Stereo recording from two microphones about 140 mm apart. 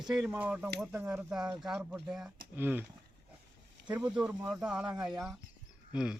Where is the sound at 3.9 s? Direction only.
5° right (ahead or behind).